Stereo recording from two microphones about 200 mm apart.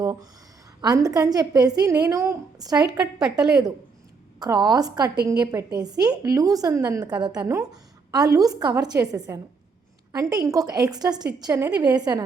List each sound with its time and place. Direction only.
0.0 s a woman's voice: 20° right (ahead or behind)
3.2 s a woman's voice: 5° right (ahead or behind)
4.4 s a woman's voice: 20° right (ahead or behind)